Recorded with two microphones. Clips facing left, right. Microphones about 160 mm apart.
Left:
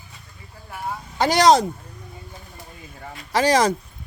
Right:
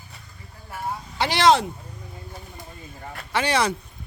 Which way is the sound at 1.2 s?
40° left (ahead or behind).